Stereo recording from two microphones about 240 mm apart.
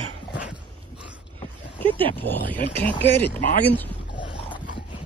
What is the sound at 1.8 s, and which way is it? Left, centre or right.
Speech, centre.